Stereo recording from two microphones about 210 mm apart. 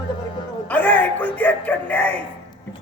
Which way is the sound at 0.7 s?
5° left (ahead or behind).